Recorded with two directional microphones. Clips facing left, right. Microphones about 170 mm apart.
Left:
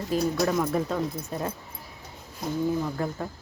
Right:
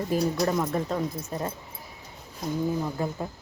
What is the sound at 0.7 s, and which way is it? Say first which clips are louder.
Speech: left 1 dB; centre (ahead or behind).